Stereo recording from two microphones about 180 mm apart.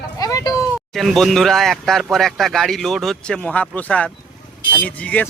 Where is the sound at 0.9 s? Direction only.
Centre (ahead or behind).